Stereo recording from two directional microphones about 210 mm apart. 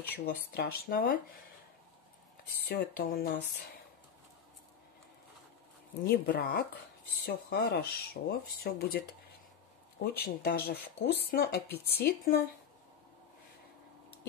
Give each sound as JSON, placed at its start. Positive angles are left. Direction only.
{"t": 0.5, "sound": "speech", "side_deg": 45}
{"t": 2.7, "sound": "speech", "side_deg": 45}
{"t": 6.0, "sound": "speech", "side_deg": 45}
{"t": 10.0, "sound": "speech", "side_deg": 50}